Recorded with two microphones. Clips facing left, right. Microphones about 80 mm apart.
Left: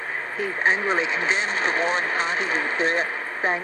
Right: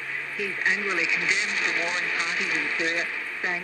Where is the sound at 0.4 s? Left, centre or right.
Left.